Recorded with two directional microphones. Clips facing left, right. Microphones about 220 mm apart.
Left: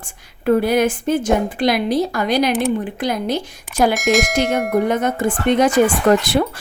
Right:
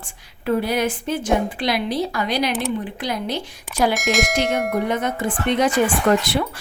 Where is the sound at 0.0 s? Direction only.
50° left (ahead or behind).